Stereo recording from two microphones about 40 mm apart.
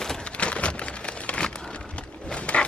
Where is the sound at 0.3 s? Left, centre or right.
Left.